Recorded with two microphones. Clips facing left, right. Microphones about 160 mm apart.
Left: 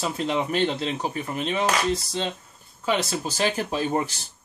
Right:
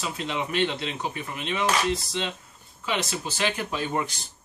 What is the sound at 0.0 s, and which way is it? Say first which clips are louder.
Speech: left 5 dB; 40° left (ahead or behind).